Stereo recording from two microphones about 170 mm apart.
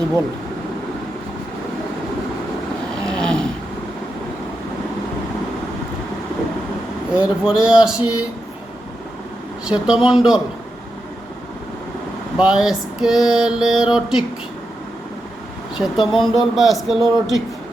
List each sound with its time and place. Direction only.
3.1 s snoring: 5° left (ahead or behind)
7.2 s mantra: 5° right (ahead or behind)
9.6 s mantra: 5° right (ahead or behind)
12.4 s mantra: 5° right (ahead or behind)
15.8 s mantra: centre (ahead or behind)